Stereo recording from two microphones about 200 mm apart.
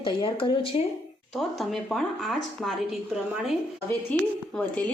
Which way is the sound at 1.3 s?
Centre (ahead or behind).